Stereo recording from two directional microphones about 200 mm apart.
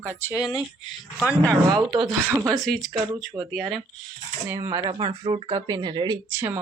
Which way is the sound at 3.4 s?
20° right (ahead or behind).